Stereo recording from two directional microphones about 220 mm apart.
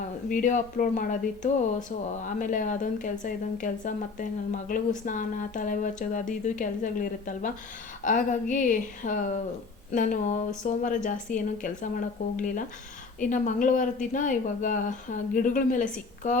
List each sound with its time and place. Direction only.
0.3 s speech: 35° left (ahead or behind)